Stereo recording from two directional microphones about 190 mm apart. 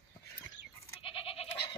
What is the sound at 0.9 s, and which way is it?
Goat, 30° left (ahead or behind).